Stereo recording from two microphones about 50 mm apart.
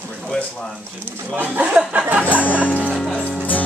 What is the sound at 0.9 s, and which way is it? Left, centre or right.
Speech, right.